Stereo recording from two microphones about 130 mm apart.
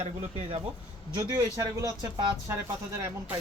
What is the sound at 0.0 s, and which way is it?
Speech, 55° right (ahead or behind).